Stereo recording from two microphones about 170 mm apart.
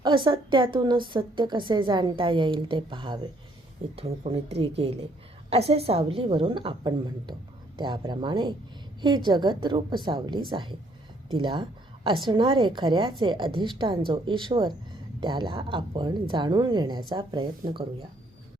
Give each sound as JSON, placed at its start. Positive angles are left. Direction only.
{"t": 0.0, "sound": "a woman's voice", "side_deg": -30}